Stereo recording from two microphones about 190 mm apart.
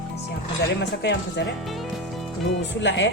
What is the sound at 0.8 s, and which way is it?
Speech, 65° left (ahead or behind).